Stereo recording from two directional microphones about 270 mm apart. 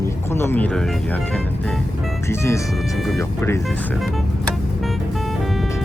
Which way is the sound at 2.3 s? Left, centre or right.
Centre.